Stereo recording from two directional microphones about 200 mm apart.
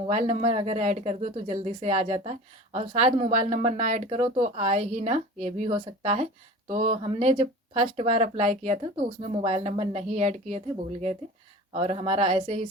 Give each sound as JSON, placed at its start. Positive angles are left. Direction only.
{"t": 0.1, "sound": "speech", "side_deg": -35}
{"t": 11.7, "sound": "speech", "side_deg": -30}